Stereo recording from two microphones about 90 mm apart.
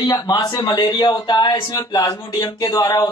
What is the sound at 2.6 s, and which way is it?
Speech, 45° left (ahead or behind).